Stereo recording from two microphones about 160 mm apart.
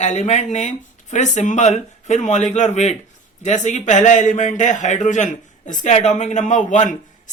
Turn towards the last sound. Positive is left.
turn(degrees=50)  # may be behind; listen again after turning